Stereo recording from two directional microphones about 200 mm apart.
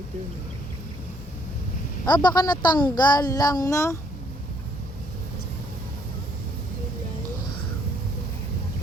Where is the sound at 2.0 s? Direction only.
20° left (ahead or behind).